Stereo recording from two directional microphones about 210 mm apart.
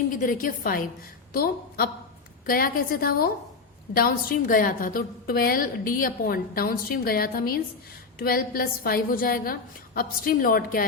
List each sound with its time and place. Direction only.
0.2 s a woman's voice: 40° left (ahead or behind)